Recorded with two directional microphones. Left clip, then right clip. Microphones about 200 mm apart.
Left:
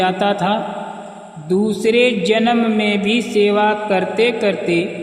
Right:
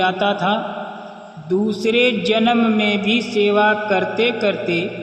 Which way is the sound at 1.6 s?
45° left (ahead or behind).